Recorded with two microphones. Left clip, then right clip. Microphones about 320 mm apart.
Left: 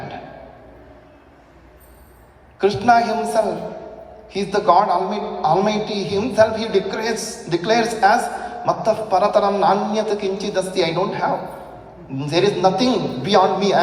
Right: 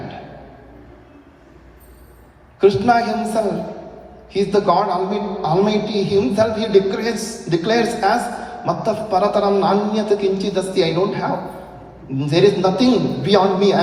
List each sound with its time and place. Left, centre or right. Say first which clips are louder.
2.6 s a man's voice: right 1 dB; centre